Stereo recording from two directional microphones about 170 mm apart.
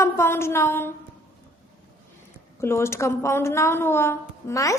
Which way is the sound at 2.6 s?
15° left (ahead or behind).